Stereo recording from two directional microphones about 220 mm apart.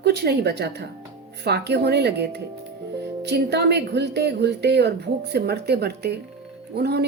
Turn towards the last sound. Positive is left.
turn(degrees=-45)  # may be behind; listen again after turning